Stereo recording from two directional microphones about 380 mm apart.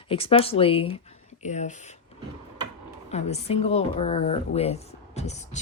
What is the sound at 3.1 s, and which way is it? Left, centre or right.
A woman's voice, centre.